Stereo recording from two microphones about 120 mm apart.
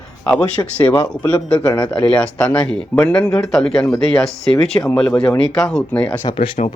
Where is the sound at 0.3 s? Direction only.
10° left (ahead or behind).